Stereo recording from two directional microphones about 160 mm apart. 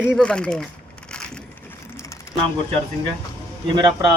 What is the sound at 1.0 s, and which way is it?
Crushing, 5° left (ahead or behind).